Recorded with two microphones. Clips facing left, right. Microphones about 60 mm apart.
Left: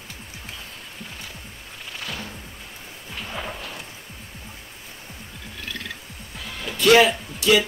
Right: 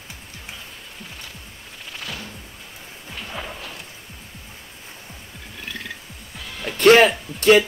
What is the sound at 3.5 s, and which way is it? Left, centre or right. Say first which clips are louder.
Music: left 1 dB; centre.